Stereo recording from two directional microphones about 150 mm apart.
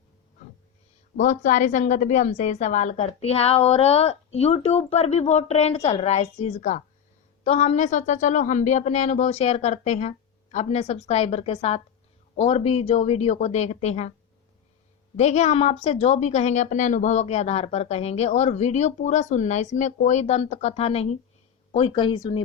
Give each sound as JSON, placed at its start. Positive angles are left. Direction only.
{"t": 1.1, "sound": "a woman's voice", "side_deg": 55}
{"t": 15.1, "sound": "a woman's voice", "side_deg": 50}
{"t": 21.9, "sound": "speech", "side_deg": 30}